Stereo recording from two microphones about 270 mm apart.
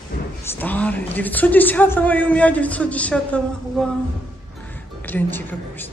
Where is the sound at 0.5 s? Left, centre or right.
Centre.